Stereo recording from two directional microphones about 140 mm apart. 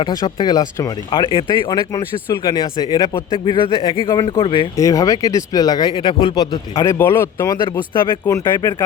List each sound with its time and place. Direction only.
0.0 s speech: 30° left (ahead or behind)
2.3 s speech: 25° left (ahead or behind)
4.8 s speech: 25° left (ahead or behind)
6.7 s speech: 20° left (ahead or behind)
7.6 s speech: 35° left (ahead or behind)